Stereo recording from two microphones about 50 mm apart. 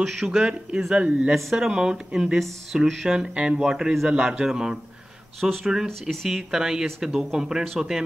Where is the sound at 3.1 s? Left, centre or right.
Centre.